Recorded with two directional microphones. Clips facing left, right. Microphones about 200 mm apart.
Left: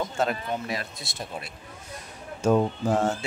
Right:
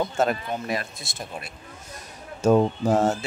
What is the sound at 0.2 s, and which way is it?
Speech, 50° right (ahead or behind).